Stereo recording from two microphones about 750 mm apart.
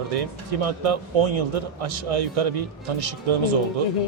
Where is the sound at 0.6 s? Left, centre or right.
Right.